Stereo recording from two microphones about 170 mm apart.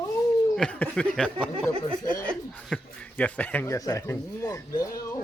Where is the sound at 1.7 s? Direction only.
30° right (ahead or behind).